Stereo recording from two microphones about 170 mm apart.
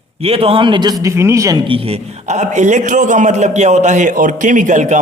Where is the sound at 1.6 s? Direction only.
35° right (ahead or behind).